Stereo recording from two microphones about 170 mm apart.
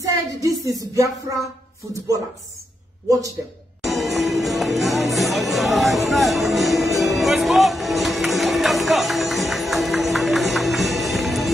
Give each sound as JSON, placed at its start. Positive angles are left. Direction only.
{"t": 0.0, "sound": "speech", "side_deg": -20}
{"t": 3.1, "sound": "speech", "side_deg": -20}
{"t": 3.8, "sound": "music", "side_deg": 0}